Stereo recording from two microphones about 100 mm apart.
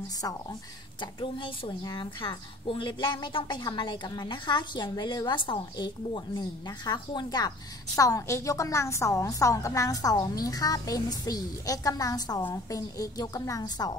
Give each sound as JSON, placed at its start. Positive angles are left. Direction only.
{"t": 1.2, "sound": "a woman's voice", "side_deg": 55}